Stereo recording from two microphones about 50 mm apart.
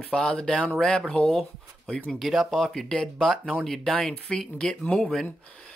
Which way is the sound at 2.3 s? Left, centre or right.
Centre.